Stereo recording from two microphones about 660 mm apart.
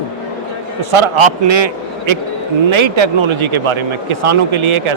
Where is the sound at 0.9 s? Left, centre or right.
Right.